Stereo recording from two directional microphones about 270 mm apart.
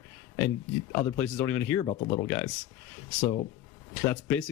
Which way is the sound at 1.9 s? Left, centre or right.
Left.